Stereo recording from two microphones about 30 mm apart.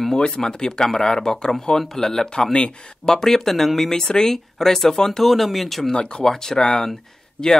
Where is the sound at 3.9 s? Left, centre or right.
Left.